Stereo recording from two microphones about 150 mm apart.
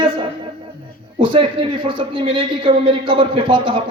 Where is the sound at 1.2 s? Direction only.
35° right (ahead or behind).